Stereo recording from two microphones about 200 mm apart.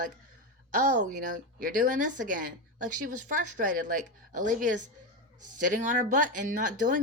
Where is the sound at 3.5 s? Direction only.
40° right (ahead or behind).